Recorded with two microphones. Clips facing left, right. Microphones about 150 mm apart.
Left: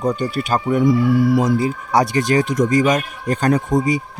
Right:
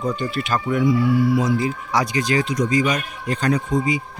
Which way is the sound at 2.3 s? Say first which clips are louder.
Left 4 dB; 45° left (ahead or behind).